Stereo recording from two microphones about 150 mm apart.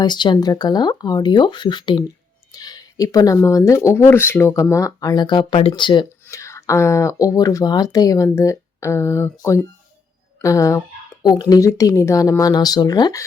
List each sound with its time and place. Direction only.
0.0 s speech: 30° left (ahead or behind)
6.2 s speech: 20° left (ahead or behind)